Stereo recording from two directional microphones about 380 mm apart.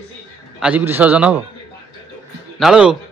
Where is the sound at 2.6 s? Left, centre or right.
Centre.